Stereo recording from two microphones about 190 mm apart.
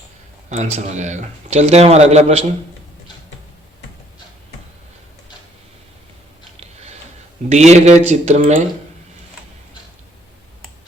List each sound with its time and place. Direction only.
0.5 s a man's voice: 35° right (ahead or behind)
6.6 s a sound: 35° right (ahead or behind)
7.5 s a man's voice: 35° right (ahead or behind)